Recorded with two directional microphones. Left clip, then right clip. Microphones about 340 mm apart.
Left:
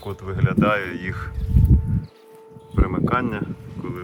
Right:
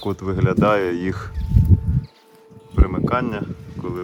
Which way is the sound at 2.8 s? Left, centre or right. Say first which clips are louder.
Right 1 dB; centre.